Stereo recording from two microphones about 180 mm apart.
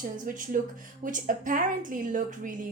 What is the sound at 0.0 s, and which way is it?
A woman's voice, 45° right (ahead or behind).